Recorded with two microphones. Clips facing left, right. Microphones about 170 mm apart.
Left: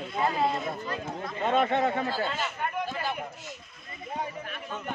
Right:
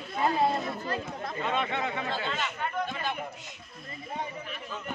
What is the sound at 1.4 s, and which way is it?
Speech, 45° left (ahead or behind).